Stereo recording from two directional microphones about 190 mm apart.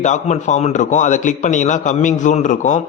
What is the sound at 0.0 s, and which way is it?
A man's voice, 40° left (ahead or behind).